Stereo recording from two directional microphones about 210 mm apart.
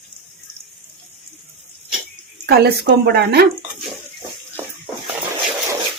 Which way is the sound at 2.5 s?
50° right (ahead or behind).